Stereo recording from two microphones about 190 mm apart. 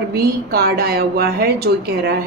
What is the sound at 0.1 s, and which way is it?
A woman's voice, 55° right (ahead or behind).